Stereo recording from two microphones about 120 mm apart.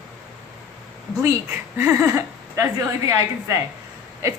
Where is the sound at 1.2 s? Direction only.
20° right (ahead or behind).